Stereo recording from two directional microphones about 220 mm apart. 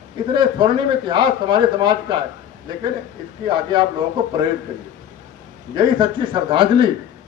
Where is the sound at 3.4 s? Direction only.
20° right (ahead or behind).